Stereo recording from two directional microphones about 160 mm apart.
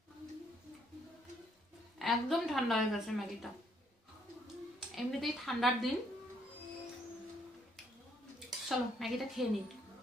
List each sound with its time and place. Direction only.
2.0 s a woman's voice: centre (ahead or behind)
4.9 s a woman's voice: centre (ahead or behind)
8.5 s speech: centre (ahead or behind)